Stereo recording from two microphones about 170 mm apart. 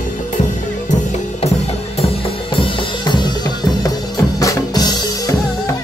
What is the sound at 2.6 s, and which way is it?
Drum, 25° left (ahead or behind).